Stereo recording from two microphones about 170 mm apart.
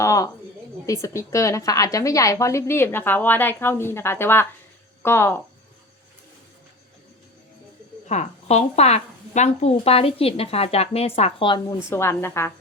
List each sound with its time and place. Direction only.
0.0 s a sound: 20° left (ahead or behind)
0.9 s a woman's voice: 20° left (ahead or behind)
8.0 s a woman's voice: 40° left (ahead or behind)
11.9 s a woman's voice: 15° left (ahead or behind)